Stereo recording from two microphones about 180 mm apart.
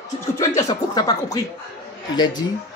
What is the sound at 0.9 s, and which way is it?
Speech, 20° left (ahead or behind).